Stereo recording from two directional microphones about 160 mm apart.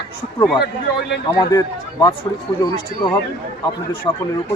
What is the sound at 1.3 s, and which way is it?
Speech, 25° left (ahead or behind).